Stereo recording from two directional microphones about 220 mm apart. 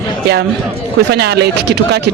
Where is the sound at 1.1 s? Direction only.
50° right (ahead or behind).